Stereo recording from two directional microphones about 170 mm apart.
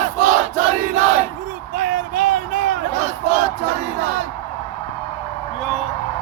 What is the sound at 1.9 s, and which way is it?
Battle cry, 50° right (ahead or behind).